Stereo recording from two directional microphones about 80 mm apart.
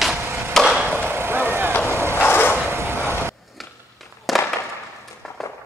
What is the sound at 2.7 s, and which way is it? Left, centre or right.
Vehicle, right.